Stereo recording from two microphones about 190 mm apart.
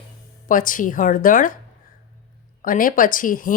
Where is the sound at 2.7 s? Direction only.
45° left (ahead or behind).